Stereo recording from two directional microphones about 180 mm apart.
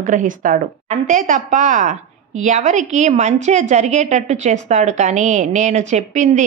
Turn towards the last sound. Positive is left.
turn(degrees=-40)  # may be behind; listen again after turning